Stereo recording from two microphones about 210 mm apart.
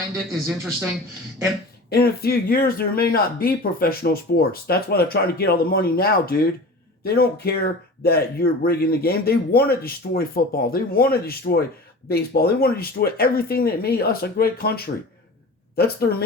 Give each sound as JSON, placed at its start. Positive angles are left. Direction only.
{"t": 0.3, "sound": "speech", "side_deg": 0}
{"t": 1.9, "sound": "speech", "side_deg": 45}